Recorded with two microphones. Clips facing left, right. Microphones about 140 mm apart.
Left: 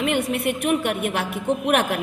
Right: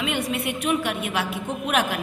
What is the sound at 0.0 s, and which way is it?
A woman's voice, 55° left (ahead or behind).